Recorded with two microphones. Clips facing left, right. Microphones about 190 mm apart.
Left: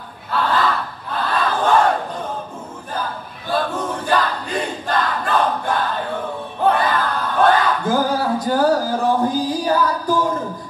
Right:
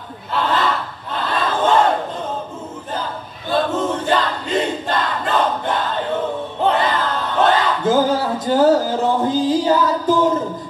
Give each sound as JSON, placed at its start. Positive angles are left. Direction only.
{"t": 0.3, "sound": "battle cry", "side_deg": -25}
{"t": 1.2, "sound": "crowd", "side_deg": -25}
{"t": 3.4, "sound": "battle cry", "side_deg": -25}